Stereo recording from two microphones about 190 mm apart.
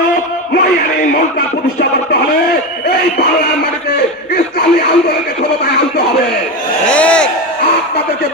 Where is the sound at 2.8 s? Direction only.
60° left (ahead or behind).